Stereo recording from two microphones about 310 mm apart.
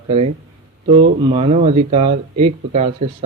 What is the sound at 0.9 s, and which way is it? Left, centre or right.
Speech, centre.